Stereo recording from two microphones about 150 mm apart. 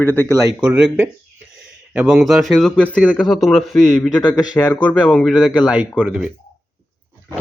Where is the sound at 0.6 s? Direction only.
5° right (ahead or behind).